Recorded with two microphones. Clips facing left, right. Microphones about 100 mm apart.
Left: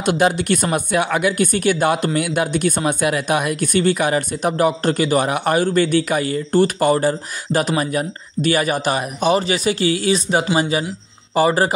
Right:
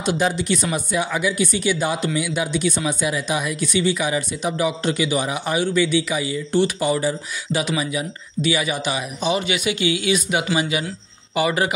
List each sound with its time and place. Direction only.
0.0 s speech: 60° left (ahead or behind)
9.4 s speech: 35° left (ahead or behind)